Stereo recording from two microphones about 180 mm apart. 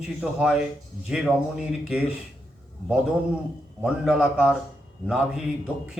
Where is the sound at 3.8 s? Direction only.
5° right (ahead or behind).